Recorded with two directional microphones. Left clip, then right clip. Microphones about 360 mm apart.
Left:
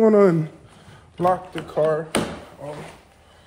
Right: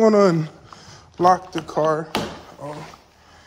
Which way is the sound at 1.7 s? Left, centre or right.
Centre.